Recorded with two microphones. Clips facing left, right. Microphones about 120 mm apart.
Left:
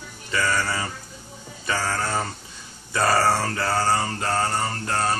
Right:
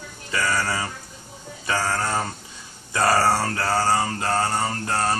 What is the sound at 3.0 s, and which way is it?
Mantra, 10° right (ahead or behind).